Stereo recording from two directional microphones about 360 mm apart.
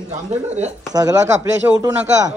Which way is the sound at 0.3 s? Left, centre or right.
Centre.